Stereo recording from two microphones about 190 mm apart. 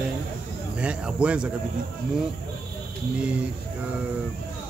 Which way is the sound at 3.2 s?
5° right (ahead or behind).